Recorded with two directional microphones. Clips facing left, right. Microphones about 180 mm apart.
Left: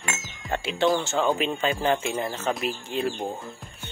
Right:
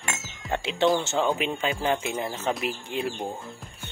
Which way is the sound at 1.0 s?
15° right (ahead or behind).